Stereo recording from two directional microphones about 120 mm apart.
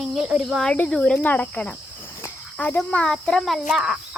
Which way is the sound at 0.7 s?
5° left (ahead or behind).